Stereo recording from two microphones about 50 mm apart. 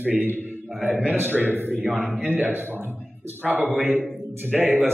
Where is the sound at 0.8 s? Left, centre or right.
Right.